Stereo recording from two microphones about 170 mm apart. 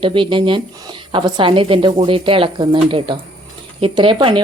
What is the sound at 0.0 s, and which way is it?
Speech, 30° right (ahead or behind).